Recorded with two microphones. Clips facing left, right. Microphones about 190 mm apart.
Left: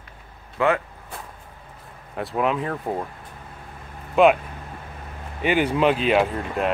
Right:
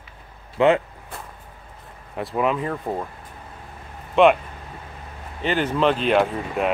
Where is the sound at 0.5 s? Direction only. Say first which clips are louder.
Right 4 dB; 20° right (ahead or behind).